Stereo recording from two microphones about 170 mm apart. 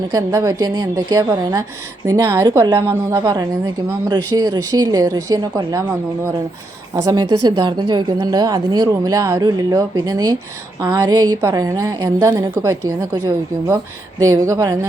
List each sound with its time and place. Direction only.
0.1 s speech: 20° right (ahead or behind)